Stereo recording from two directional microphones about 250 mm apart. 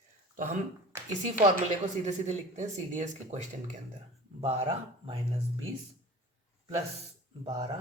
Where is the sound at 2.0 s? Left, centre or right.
Right.